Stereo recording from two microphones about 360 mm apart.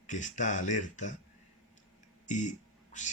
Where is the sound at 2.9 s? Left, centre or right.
Centre.